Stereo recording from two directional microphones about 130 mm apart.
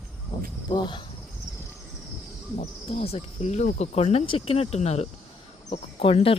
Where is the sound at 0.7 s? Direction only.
35° left (ahead or behind).